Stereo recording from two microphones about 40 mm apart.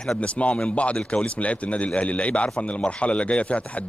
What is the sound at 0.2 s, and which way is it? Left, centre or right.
A man's voice, left.